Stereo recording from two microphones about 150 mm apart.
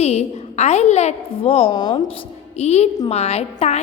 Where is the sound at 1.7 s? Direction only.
25° left (ahead or behind).